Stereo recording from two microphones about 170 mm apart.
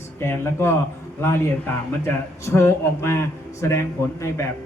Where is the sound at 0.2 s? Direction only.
15° left (ahead or behind).